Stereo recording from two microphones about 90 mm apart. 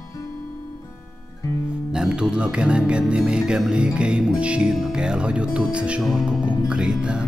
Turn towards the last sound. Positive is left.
turn(degrees=-10)  # may be behind; listen again after turning